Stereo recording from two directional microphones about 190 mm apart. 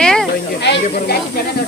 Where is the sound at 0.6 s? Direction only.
60° left (ahead or behind).